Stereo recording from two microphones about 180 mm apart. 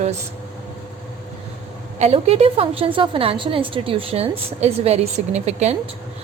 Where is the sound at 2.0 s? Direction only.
35° right (ahead or behind).